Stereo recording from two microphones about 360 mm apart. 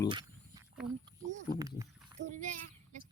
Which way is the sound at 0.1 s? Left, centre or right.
Centre.